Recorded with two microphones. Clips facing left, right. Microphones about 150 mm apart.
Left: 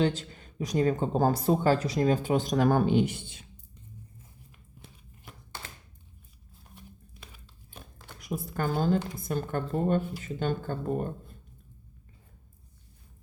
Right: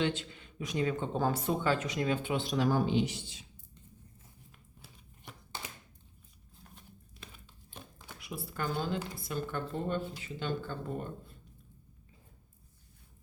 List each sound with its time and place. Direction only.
0.0 s speech: 40° left (ahead or behind); by 3.4 s 55° left (ahead or behind)
7.3 s a sound: 5° left (ahead or behind)
8.2 s speech: 45° left (ahead or behind)